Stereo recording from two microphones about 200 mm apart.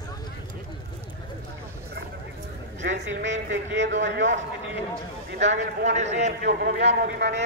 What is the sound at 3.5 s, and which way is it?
Speech, 65° right (ahead or behind).